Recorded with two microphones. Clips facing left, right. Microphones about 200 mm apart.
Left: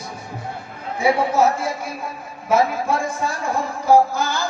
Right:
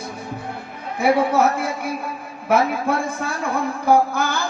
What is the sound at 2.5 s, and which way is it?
Speech, 60° right (ahead or behind).